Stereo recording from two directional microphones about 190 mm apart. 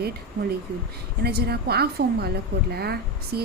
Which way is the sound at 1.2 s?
55° right (ahead or behind).